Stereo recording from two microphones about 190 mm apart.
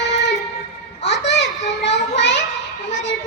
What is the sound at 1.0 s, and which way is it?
Children playing, 65° left (ahead or behind).